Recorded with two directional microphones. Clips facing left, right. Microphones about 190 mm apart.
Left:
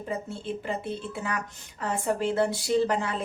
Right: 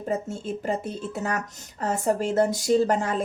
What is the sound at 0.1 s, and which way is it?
A woman's voice, 45° right (ahead or behind).